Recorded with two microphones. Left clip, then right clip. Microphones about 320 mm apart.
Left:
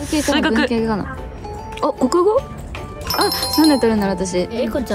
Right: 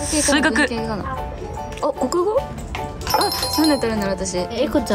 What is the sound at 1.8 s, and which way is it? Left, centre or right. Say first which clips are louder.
Music: left 4 dB; left.